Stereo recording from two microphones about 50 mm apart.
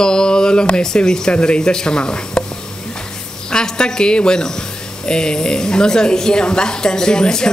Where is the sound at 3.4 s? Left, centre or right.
Centre.